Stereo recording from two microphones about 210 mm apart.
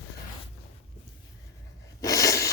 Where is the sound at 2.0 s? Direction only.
15° left (ahead or behind).